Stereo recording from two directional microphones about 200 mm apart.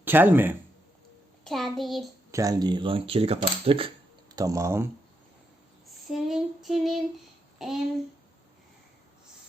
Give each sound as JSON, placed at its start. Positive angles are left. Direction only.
{"t": 0.0, "sound": "speech", "side_deg": -10}
{"t": 1.5, "sound": "a child's voice", "side_deg": 0}
{"t": 2.3, "sound": "speech", "side_deg": -20}
{"t": 6.1, "sound": "female singing", "side_deg": 0}
{"t": 7.6, "sound": "a child's voice", "side_deg": 0}